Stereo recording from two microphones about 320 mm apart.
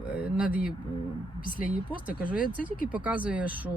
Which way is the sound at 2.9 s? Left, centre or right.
Centre.